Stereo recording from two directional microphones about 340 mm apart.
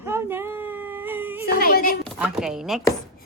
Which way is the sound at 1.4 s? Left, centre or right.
Left.